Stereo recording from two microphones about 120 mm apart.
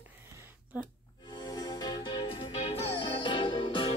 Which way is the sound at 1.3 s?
35° left (ahead or behind).